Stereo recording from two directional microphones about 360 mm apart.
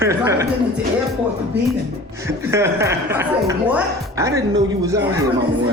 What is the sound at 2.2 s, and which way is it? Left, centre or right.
Speech, centre.